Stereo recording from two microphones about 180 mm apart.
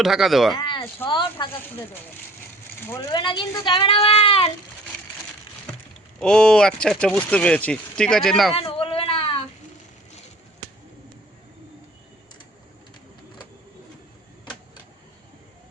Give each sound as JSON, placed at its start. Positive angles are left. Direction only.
{"t": 0.0, "sound": "speech", "side_deg": 0}
{"t": 0.6, "sound": "a sound", "side_deg": 25}
{"t": 1.0, "sound": "speech", "side_deg": 25}
{"t": 3.1, "sound": "speech", "side_deg": 25}
{"t": 6.1, "sound": "speech", "side_deg": 5}
{"t": 8.5, "sound": "a sound", "side_deg": 30}